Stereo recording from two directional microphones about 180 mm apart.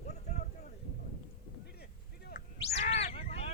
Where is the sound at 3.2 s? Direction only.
35° left (ahead or behind).